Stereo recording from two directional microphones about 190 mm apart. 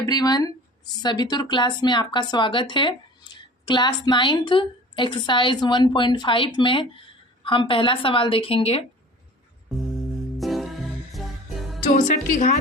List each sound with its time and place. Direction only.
0.0 s a woman's voice: 20° left (ahead or behind)
10.3 s music: centre (ahead or behind)
11.9 s a woman's voice: 40° left (ahead or behind)